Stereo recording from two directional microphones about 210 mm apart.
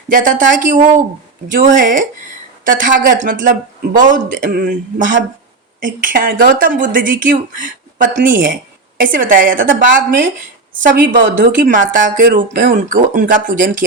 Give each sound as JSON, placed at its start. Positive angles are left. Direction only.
{"t": 0.1, "sound": "speech", "side_deg": -40}
{"t": 11.1, "sound": "speech", "side_deg": -40}